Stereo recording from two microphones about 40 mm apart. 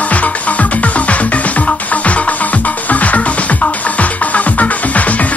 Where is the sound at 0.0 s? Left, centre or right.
Left.